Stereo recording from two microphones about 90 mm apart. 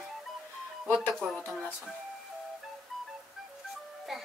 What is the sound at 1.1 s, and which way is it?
Speech, 5° left (ahead or behind).